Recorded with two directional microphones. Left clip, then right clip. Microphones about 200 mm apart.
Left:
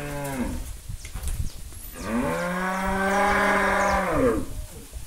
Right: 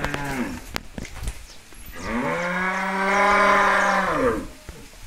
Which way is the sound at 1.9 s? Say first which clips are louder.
Right 2 dB; 55° left (ahead or behind).